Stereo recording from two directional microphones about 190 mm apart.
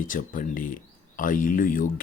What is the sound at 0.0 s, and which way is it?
Speech, 45° left (ahead or behind).